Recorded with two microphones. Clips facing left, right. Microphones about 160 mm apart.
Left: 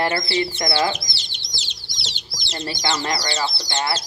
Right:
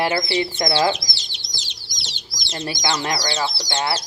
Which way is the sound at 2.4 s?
10° right (ahead or behind).